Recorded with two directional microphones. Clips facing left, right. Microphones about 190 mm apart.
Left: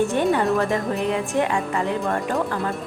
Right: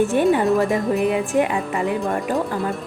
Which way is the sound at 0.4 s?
Centre (ahead or behind).